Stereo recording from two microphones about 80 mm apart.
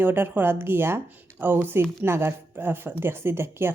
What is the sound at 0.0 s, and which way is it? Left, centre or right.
A woman's voice, right.